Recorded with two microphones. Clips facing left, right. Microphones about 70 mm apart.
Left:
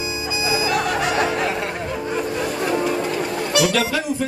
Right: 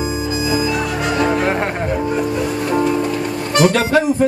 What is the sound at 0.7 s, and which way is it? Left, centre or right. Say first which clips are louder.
Music: right 1 dB; left.